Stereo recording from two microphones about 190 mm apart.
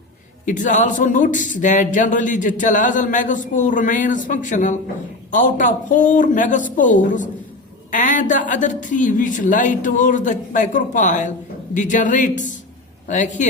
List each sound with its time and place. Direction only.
0.4 s speech: 40° left (ahead or behind)